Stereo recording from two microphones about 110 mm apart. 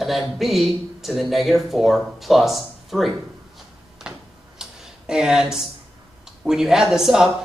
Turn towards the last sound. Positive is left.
turn(degrees=-5)  # may be behind; listen again after turning